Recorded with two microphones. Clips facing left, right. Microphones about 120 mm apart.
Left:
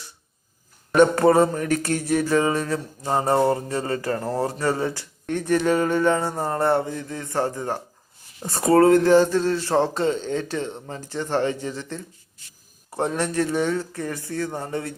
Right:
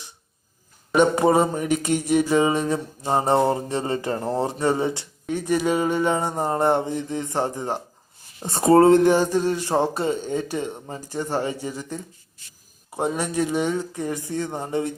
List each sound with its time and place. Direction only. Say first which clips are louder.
0.9 s mantra: left 2 dB; 15° right (ahead or behind)
5.2 s speech: left 1 dB; 10° right (ahead or behind)
8.4 s mantra: right 2 dB; 25° right (ahead or behind)
9.1 s speech: left 3 dB; 15° right (ahead or behind)